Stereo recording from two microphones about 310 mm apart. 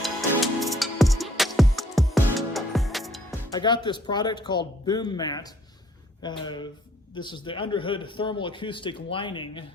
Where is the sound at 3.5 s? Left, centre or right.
Centre.